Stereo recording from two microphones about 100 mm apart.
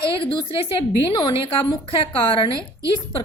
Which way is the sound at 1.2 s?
55° left (ahead or behind).